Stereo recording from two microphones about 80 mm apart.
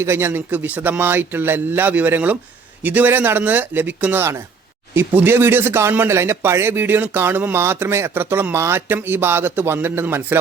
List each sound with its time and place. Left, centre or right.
0.0 s a man's voice: right
4.2 s a man's voice: right